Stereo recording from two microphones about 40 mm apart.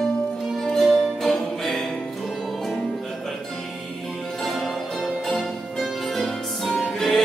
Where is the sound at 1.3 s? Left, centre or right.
Centre.